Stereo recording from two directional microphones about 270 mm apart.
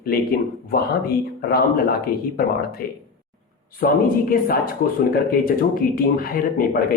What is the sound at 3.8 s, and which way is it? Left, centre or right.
Speech, left.